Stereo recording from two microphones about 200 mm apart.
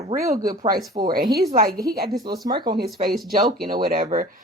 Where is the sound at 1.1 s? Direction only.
50° right (ahead or behind).